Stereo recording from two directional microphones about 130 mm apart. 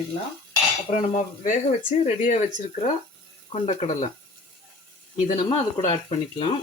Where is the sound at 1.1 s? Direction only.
70° left (ahead or behind).